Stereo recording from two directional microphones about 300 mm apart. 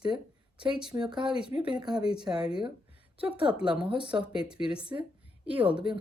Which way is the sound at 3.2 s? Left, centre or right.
Centre.